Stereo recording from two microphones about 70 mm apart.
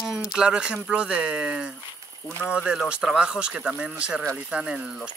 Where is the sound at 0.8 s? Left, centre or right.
Centre.